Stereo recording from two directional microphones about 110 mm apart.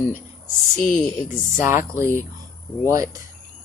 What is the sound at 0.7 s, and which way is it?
Speech, 5° left (ahead or behind).